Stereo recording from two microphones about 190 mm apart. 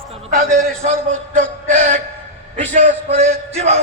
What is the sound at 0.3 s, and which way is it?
Music, 55° right (ahead or behind).